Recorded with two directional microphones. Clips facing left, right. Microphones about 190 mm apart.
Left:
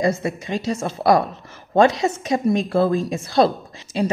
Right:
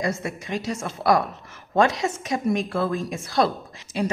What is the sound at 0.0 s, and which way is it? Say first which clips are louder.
A woman's voice: left 6 dB; 30° left (ahead or behind).